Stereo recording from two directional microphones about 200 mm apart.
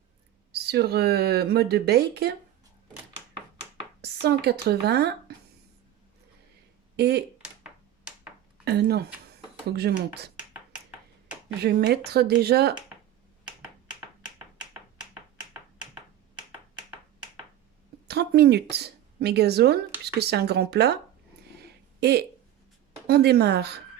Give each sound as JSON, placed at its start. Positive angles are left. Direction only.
{"t": 0.5, "sound": "speech", "side_deg": -55}
{"t": 4.0, "sound": "speech", "side_deg": -55}
{"t": 6.9, "sound": "speech", "side_deg": -55}
{"t": 7.6, "sound": "finger snapping", "side_deg": -5}
{"t": 8.6, "sound": "speech", "side_deg": -55}
{"t": 11.6, "sound": "speech", "side_deg": -55}
{"t": 18.1, "sound": "speech", "side_deg": -55}
{"t": 22.0, "sound": "speech", "side_deg": -55}